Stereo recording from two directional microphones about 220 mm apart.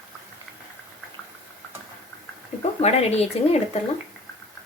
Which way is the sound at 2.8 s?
30° left (ahead or behind).